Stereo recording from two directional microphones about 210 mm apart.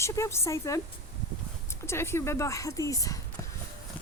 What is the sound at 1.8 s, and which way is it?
A woman's voice, 10° left (ahead or behind).